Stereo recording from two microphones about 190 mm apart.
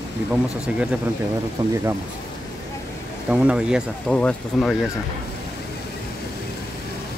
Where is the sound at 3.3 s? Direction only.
5° right (ahead or behind).